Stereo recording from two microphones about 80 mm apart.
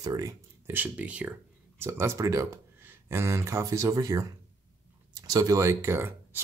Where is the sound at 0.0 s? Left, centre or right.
Right.